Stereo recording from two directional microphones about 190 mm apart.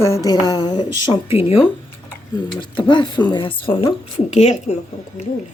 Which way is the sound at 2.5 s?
25° left (ahead or behind).